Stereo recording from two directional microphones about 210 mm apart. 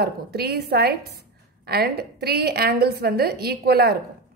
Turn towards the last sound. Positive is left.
turn(degrees=-50)  # may be behind; listen again after turning